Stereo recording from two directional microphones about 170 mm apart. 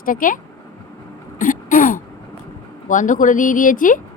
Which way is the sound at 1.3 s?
50° left (ahead or behind).